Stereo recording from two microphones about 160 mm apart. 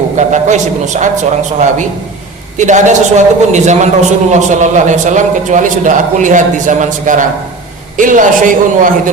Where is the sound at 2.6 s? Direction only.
50° right (ahead or behind).